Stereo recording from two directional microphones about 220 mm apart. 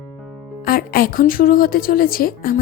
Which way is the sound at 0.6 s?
45° left (ahead or behind).